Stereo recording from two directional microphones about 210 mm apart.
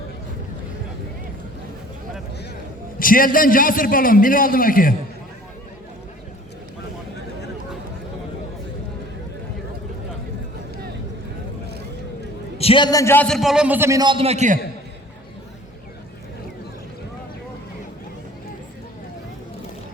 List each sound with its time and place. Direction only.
3.0 s a man's voice: 40° left (ahead or behind)
12.5 s a man's voice: 25° left (ahead or behind); by 14.6 s 35° right (ahead or behind)